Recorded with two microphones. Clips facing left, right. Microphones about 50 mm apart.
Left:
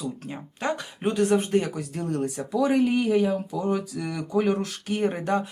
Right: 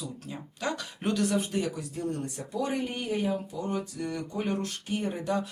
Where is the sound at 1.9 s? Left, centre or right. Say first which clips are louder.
Left 5 dB; left.